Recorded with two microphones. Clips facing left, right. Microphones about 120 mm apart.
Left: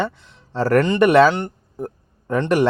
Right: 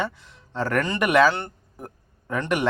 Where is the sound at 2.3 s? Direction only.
35° left (ahead or behind).